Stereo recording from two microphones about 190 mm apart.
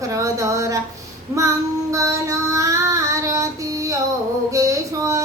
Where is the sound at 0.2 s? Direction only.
15° right (ahead or behind).